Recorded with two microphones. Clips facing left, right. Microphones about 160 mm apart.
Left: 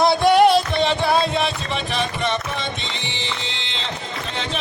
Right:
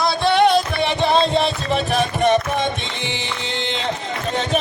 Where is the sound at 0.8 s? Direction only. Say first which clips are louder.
Right 1 dB; 15° right (ahead or behind).